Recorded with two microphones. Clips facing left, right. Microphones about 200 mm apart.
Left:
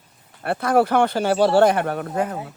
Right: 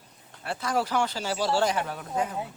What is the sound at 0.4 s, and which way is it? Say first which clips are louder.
Speech: left 10 dB; 55° left (ahead or behind).